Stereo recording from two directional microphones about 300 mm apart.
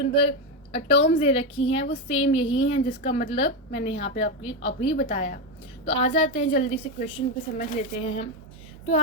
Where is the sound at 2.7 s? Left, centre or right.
Left.